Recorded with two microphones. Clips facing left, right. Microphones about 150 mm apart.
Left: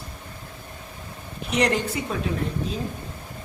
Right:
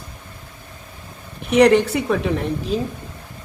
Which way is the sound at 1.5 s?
65° right (ahead or behind).